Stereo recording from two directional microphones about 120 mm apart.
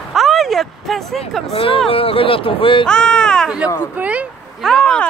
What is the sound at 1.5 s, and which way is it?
Speech, 50° left (ahead or behind).